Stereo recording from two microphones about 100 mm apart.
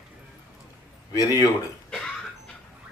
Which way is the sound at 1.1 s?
35° left (ahead or behind).